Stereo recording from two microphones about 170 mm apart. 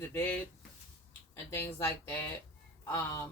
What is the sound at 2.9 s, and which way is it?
Speech, 20° left (ahead or behind).